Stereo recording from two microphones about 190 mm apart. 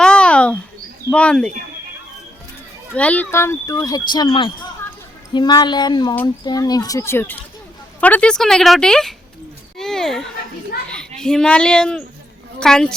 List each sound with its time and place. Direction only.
0.0 s bird: 5° left (ahead or behind)
1.1 s speech: 5° left (ahead or behind)
2.9 s speech: 5° left (ahead or behind)
9.7 s a sound: centre (ahead or behind)
11.2 s a woman's voice: 5° left (ahead or behind)